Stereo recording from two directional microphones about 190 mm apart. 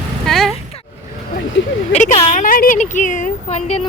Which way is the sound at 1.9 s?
35° left (ahead or behind).